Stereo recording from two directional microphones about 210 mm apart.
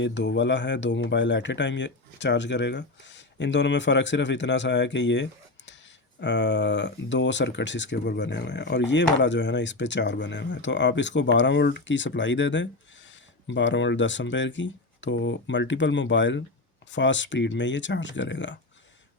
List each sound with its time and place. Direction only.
0.0 s speech: 60° left (ahead or behind)